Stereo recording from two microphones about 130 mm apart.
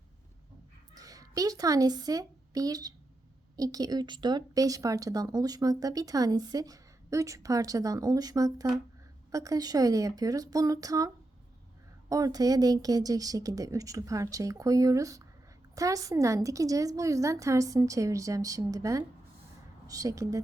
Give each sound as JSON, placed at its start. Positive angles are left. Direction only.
{"t": 0.9, "sound": "a woman's voice", "side_deg": -25}